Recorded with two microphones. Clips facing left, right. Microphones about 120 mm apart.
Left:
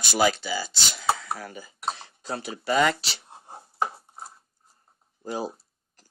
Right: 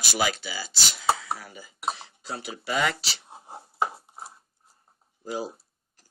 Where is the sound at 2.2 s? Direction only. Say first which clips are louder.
Left 4 dB; 45° left (ahead or behind).